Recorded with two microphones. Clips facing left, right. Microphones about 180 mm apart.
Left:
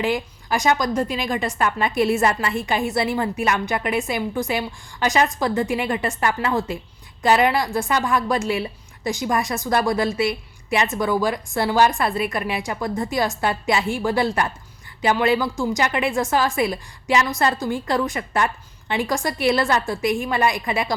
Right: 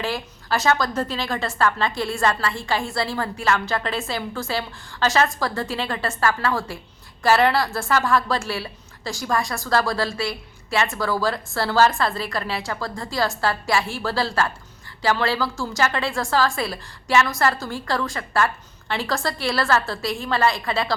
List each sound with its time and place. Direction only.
0.0 s a woman's voice: 15° left (ahead or behind)